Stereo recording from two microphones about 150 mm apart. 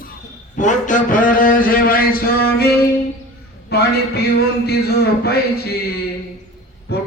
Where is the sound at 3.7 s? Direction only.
90° left.